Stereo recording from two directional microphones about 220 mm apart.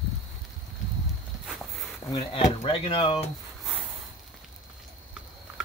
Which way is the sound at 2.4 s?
25° left (ahead or behind).